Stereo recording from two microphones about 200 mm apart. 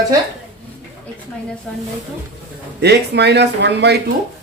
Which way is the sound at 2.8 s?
55° right (ahead or behind).